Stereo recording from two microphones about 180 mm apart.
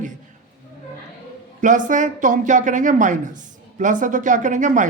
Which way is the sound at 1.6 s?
45° right (ahead or behind).